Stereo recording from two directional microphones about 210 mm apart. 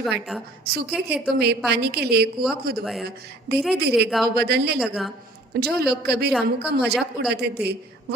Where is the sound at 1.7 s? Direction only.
50° right (ahead or behind).